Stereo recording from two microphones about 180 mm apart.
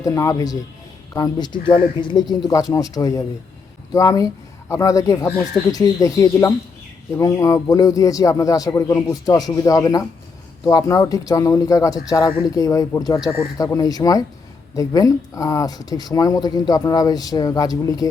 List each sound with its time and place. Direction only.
0.0 s speech: 20° left (ahead or behind)